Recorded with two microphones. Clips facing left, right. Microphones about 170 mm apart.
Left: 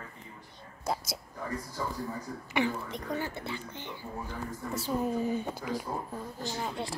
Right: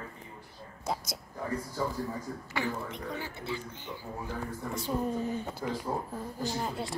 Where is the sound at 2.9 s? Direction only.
50° left (ahead or behind).